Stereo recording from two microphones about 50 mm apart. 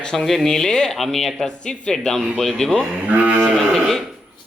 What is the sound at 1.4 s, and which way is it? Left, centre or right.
Speech, centre.